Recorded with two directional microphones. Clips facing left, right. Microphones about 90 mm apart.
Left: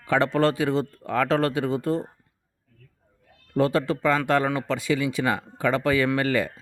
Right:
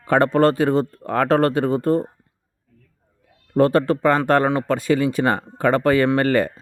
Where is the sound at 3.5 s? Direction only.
45° right (ahead or behind).